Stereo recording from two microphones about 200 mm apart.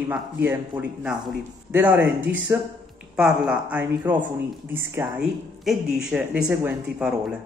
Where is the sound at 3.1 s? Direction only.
5° right (ahead or behind).